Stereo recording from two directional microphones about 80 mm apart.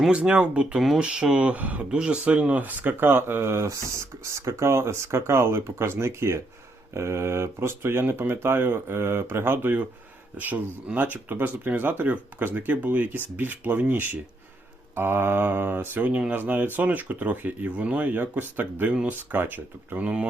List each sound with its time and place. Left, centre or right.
0.1 s speech: centre